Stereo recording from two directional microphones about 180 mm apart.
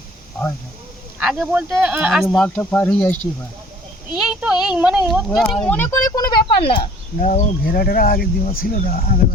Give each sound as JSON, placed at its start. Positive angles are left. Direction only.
{"t": 1.2, "sound": "speech", "side_deg": 0}
{"t": 2.2, "sound": "speech", "side_deg": 5}
{"t": 4.3, "sound": "speech", "side_deg": -5}
{"t": 7.2, "sound": "speech", "side_deg": 45}